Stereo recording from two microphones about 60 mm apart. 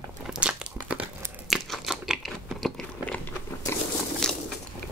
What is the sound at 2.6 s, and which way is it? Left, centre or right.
Biting, centre.